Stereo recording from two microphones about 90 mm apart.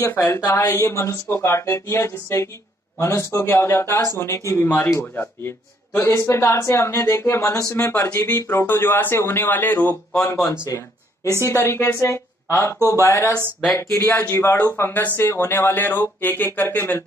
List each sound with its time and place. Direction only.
0.1 s speech: 25° left (ahead or behind)
11.4 s speech: 30° left (ahead or behind)
12.7 s speech: 30° right (ahead or behind)
13.0 s speech: 35° left (ahead or behind)